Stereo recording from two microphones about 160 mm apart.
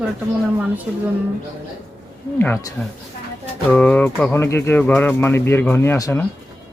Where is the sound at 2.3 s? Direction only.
15° left (ahead or behind).